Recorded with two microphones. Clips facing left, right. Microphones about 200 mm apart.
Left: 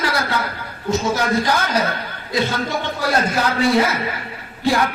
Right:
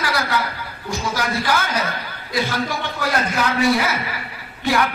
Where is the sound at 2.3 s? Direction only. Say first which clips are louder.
Left 2 dB; 25° left (ahead or behind).